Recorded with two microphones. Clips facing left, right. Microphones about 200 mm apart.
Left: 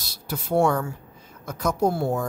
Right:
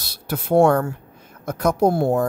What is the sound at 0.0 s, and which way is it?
Speech, 60° right (ahead or behind).